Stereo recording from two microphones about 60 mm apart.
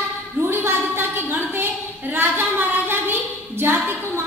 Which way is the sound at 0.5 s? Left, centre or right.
Right.